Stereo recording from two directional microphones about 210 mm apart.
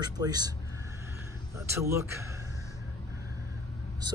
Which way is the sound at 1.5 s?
15° right (ahead or behind).